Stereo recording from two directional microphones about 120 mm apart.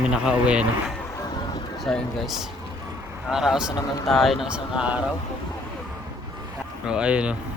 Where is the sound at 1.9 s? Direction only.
5° left (ahead or behind).